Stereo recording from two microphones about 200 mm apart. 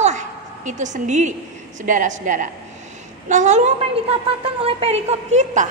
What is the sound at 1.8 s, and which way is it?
A woman's voice, 40° right (ahead or behind).